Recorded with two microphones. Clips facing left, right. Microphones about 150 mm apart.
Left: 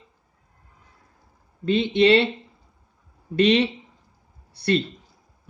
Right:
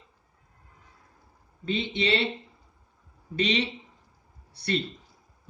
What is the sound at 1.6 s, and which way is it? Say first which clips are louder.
Speech: left 10 dB; 65° left (ahead or behind).